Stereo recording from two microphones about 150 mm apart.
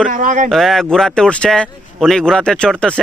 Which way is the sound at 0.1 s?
60° right (ahead or behind).